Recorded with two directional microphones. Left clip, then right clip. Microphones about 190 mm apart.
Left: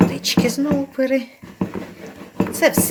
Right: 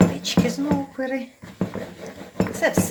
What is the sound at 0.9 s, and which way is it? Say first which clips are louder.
Speech: left 8 dB; 50° left (ahead or behind).